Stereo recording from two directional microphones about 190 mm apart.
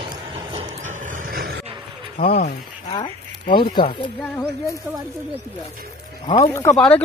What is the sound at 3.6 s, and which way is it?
Speech, 50° left (ahead or behind).